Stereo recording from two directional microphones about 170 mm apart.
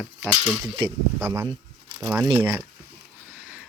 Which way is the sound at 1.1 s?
15° right (ahead or behind).